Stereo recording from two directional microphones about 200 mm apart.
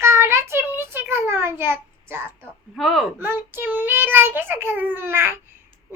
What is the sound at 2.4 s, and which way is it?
Speech, centre (ahead or behind).